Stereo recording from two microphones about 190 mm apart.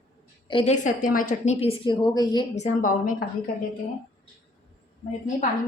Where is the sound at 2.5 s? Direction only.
40° left (ahead or behind).